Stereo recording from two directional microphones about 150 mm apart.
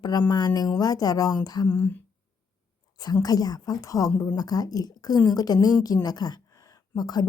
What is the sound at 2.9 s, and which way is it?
A woman's voice, 25° left (ahead or behind).